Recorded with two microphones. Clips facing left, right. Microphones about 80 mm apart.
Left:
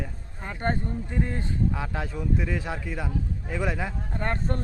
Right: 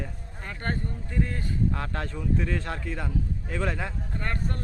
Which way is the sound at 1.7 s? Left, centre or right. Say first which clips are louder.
Left 1 dB; centre.